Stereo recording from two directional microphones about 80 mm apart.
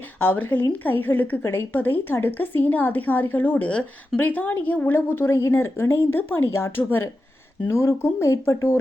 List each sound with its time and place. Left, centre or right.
0.2 s a woman's voice: left